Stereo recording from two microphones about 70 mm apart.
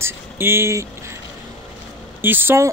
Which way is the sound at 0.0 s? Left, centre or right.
Right.